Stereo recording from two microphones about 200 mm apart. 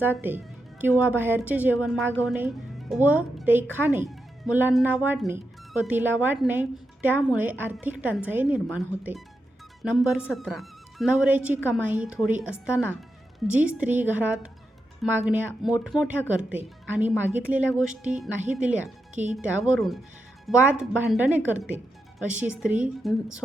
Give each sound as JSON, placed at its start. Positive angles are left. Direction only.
{"t": 0.0, "sound": "a woman's voice", "side_deg": -10}